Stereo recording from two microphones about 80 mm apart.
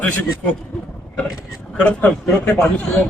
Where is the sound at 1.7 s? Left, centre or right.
Centre.